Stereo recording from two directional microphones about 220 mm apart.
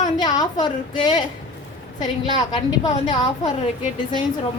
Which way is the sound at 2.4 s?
20° left (ahead or behind).